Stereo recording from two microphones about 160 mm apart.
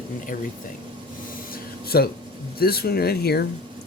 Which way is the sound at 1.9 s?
80° left.